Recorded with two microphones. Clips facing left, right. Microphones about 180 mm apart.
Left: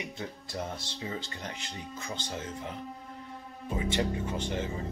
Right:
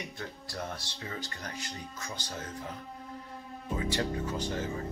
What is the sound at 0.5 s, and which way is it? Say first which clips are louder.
Speech: left 2 dB; 20° left (ahead or behind).